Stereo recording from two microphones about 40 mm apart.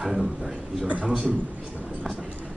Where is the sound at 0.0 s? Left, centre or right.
Centre.